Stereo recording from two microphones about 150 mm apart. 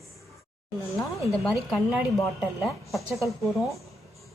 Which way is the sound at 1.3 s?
Centre (ahead or behind).